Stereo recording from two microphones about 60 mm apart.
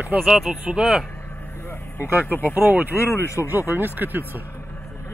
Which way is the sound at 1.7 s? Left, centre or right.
Left.